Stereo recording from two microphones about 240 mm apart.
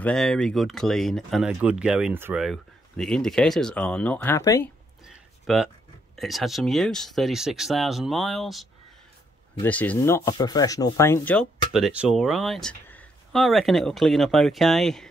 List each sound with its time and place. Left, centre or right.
0.0 s speech: centre
5.0 s a sound: centre
6.1 s speech: centre
11.7 s speech: centre